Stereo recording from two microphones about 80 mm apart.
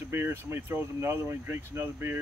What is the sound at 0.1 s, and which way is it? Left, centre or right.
Speech, right.